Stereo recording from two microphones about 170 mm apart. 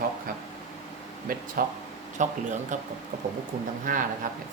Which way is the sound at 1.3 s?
55° right (ahead or behind).